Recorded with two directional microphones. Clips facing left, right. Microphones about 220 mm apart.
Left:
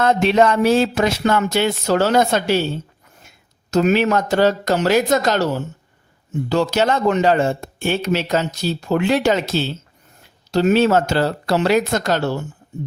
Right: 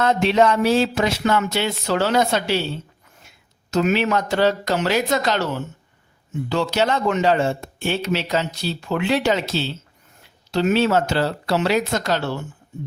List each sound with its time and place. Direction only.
0.0 s speech: 50° left (ahead or behind)